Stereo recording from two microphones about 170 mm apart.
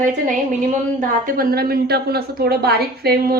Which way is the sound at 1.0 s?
55° right (ahead or behind).